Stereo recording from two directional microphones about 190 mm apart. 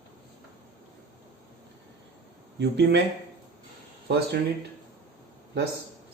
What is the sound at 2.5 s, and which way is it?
Speech, 65° right (ahead or behind).